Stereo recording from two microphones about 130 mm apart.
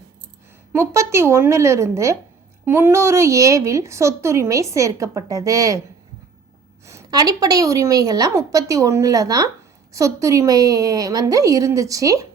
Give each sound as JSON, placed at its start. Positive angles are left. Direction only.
{"t": 0.7, "sound": "speech", "side_deg": -20}
{"t": 6.8, "sound": "speech", "side_deg": -25}